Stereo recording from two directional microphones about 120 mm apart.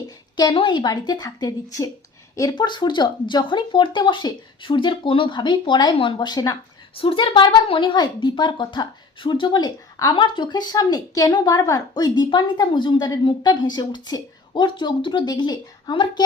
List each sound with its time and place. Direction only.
0.5 s speech: 40° left (ahead or behind)
2.6 s speech: 40° left (ahead or behind)